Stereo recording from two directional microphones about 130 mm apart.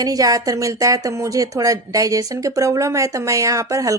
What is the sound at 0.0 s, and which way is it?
Speech, 30° right (ahead or behind).